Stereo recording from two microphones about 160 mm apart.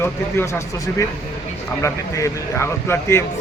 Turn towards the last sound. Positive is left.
turn(degrees=15)  # may be behind; listen again after turning